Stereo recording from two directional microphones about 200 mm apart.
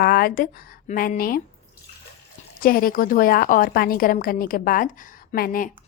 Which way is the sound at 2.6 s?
45° left (ahead or behind).